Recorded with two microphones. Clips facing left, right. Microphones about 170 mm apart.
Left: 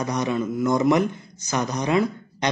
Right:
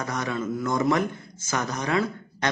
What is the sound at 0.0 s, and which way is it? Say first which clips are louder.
Speech: left 4 dB; 20° left (ahead or behind).